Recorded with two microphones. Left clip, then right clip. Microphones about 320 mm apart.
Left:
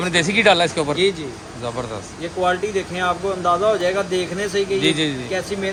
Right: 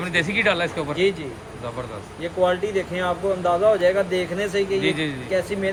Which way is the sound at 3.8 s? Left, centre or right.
Centre.